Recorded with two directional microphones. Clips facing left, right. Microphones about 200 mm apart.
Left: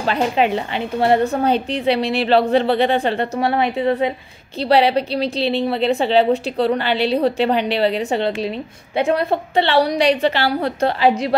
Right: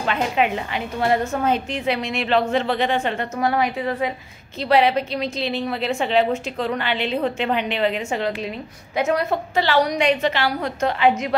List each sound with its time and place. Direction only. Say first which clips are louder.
0.0 s a woman's voice: left 3 dB; 35° left (ahead or behind)